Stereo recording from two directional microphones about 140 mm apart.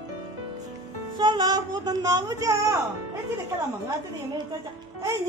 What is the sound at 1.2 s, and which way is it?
A woman's voice, 30° right (ahead or behind).